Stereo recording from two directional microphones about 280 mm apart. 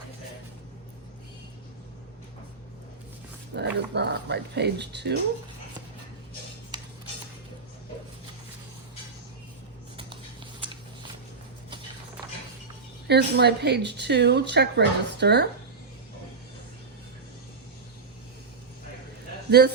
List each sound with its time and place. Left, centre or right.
3.5 s speech: right
6.7 s a sound: centre
13.1 s speech: right
19.5 s a man's voice: right